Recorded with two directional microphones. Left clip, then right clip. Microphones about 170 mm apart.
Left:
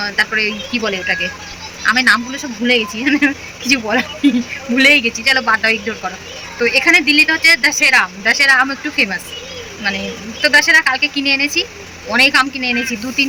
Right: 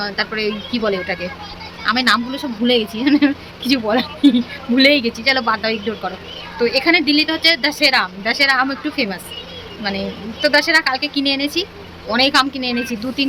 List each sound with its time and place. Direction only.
0.0 s speech: 15° right (ahead or behind)